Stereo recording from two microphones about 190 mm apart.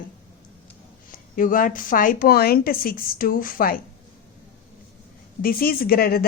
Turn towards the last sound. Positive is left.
turn(degrees=50)  # may be behind; listen again after turning